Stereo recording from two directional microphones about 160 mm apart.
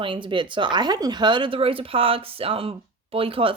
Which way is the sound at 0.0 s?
30° right (ahead or behind).